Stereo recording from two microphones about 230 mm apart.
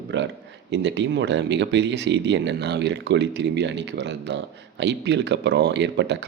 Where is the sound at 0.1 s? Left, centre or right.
Right.